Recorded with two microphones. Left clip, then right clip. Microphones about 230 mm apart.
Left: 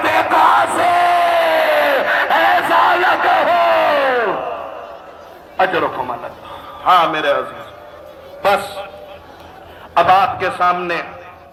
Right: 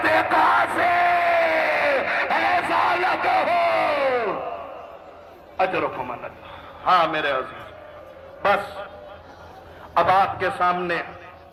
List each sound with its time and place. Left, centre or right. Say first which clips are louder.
0.0 s a sound: left 6 dB; centre; by 4.6 s left
5.5 s a man's voice: left 7 dB; left
6.8 s a man's voice: left 6 dB; centre
9.9 s a man's voice: left 6 dB; right